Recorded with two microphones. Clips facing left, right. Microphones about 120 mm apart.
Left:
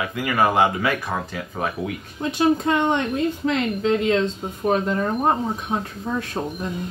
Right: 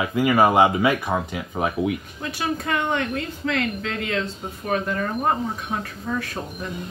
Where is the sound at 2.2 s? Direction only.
20° left (ahead or behind).